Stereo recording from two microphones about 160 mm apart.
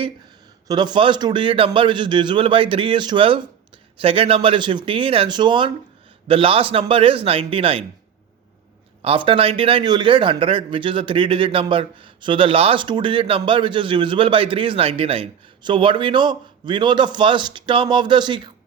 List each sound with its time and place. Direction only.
0.7 s a man's voice: 25° right (ahead or behind)
9.0 s a man's voice: 35° right (ahead or behind)